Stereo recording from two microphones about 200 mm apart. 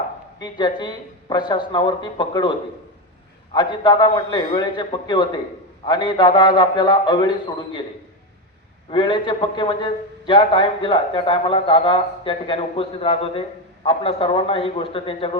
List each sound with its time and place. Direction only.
0.3 s a man's voice: 20° left (ahead or behind)
8.9 s a man's voice: 25° left (ahead or behind)